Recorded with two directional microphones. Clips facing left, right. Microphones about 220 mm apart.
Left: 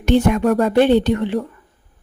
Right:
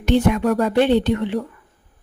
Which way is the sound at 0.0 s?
50° left (ahead or behind).